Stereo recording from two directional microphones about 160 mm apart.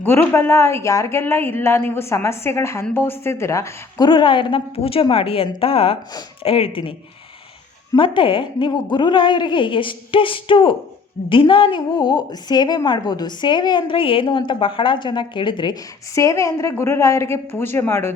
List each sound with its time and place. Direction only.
0.0 s a woman's voice: 15° left (ahead or behind); by 6.9 s 35° left (ahead or behind)
7.9 s a woman's voice: 30° left (ahead or behind)
16.1 s a woman's voice: 20° left (ahead or behind)